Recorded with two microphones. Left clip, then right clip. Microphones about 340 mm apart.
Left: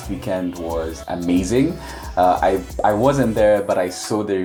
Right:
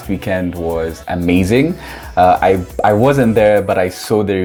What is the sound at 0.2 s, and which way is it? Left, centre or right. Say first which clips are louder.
Speech: right 4 dB; right.